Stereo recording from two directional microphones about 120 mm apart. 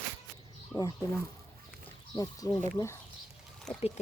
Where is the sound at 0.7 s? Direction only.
30° left (ahead or behind).